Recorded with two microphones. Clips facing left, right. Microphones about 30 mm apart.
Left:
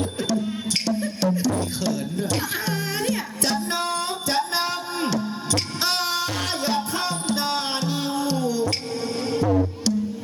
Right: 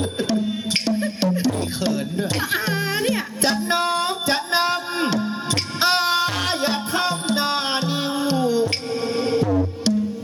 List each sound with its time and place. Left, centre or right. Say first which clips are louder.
0.2 s music: right 4 dB; right